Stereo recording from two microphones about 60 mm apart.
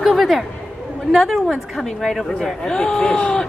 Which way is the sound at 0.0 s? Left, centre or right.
Centre.